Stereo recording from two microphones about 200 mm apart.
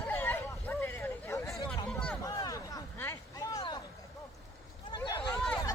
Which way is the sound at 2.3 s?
15° left (ahead or behind).